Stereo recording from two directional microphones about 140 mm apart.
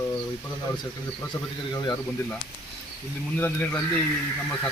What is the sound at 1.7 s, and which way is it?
Speech, 30° left (ahead or behind).